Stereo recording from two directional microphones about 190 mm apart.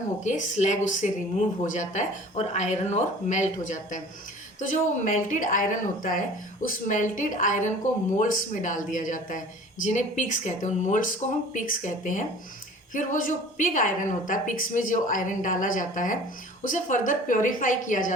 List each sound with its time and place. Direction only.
0.3 s a woman's voice: 40° left (ahead or behind)